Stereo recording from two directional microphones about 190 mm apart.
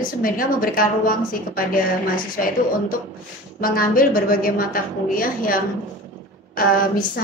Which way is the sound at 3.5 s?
50° left (ahead or behind).